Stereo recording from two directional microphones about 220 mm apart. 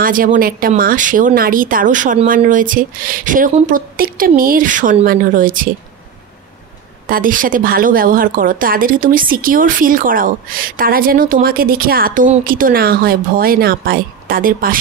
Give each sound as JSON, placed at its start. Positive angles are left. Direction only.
{"t": 0.0, "sound": "a woman's voice", "side_deg": -40}
{"t": 7.1, "sound": "a woman's voice", "side_deg": -40}